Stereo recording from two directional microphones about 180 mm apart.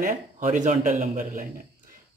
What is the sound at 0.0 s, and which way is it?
Speech, 45° right (ahead or behind).